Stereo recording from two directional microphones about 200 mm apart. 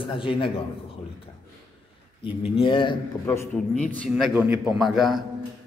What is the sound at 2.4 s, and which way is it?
Speech, 25° left (ahead or behind).